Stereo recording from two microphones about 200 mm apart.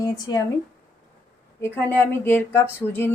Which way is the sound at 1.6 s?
10° left (ahead or behind).